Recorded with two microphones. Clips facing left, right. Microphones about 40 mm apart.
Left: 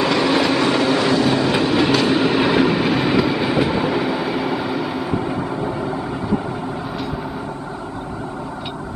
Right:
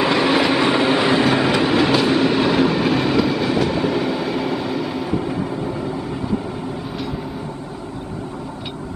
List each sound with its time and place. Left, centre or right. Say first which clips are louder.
0.0 s train: even; centre
1.8 s train: even; centre